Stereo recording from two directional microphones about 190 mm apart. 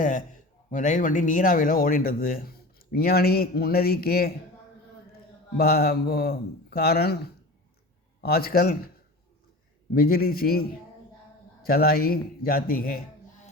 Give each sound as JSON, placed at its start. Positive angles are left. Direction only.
{"t": 0.0, "sound": "a man's voice", "side_deg": 40}
{"t": 5.5, "sound": "a man's voice", "side_deg": 55}
{"t": 8.2, "sound": "speech", "side_deg": 55}
{"t": 9.9, "sound": "speech", "side_deg": 50}